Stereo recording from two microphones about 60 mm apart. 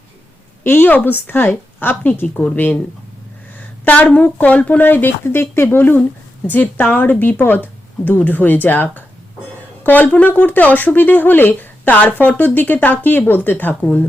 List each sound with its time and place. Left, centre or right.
0.6 s a woman's voice: left
4.8 s a woman's voice: left